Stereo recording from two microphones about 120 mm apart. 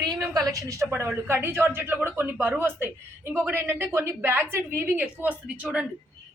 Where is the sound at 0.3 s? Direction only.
30° right (ahead or behind).